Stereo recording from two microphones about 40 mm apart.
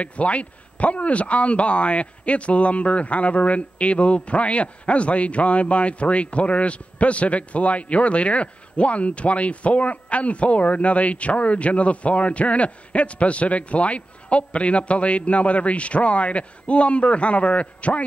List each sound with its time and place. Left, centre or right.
0.0 s speech: left